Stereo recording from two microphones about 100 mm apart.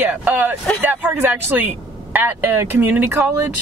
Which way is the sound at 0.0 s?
15° right (ahead or behind).